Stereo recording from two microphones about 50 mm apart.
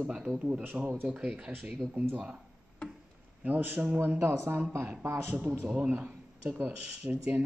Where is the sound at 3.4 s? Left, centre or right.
Right.